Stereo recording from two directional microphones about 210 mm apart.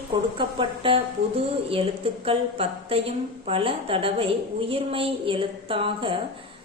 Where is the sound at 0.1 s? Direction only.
25° right (ahead or behind).